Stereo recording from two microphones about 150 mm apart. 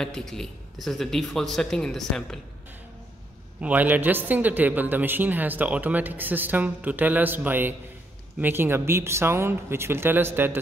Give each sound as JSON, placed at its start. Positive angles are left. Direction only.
{"t": 0.0, "sound": "a man's voice", "side_deg": 5}
{"t": 3.6, "sound": "speech", "side_deg": -10}